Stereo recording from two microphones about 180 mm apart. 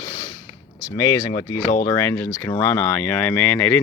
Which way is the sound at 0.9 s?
20° left (ahead or behind).